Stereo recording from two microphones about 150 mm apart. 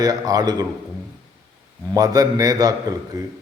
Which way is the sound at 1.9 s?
25° right (ahead or behind).